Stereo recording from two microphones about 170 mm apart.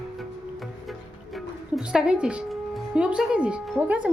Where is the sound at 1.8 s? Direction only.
5° right (ahead or behind).